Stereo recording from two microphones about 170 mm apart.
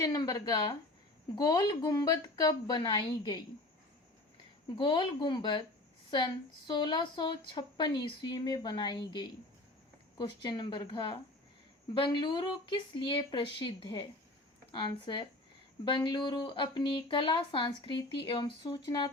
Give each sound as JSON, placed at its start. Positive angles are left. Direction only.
{"t": 0.0, "sound": "speech", "side_deg": 25}
{"t": 4.8, "sound": "speech", "side_deg": 30}